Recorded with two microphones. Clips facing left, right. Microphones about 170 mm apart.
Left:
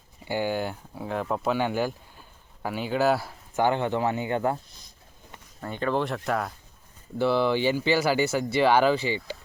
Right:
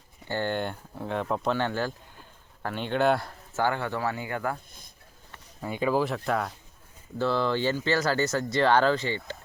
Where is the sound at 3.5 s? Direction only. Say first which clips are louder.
Left 4 dB; 20° left (ahead or behind).